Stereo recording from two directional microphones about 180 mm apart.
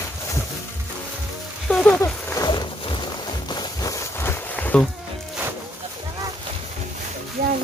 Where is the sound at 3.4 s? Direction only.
25° left (ahead or behind).